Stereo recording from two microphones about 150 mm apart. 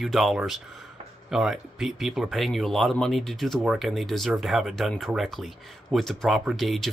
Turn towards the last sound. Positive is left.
turn(degrees=0)  # may be behind; listen again after turning